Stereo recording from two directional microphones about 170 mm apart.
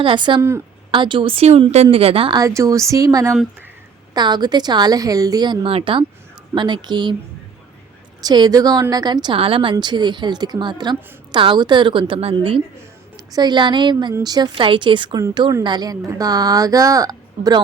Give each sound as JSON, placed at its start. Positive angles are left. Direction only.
{"t": 0.0, "sound": "a woman's voice", "side_deg": -30}
{"t": 2.4, "sound": "a woman's voice", "side_deg": -20}
{"t": 8.2, "sound": "a woman's voice", "side_deg": -25}